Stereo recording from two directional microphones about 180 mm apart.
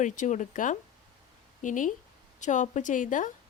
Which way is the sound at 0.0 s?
45° left (ahead or behind).